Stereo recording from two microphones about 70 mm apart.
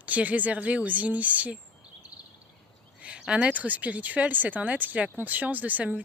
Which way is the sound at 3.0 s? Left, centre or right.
Centre.